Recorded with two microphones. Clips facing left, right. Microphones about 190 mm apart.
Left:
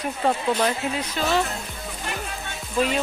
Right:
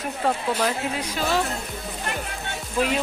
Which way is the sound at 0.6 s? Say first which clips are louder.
Left 1 dB; 10° right (ahead or behind).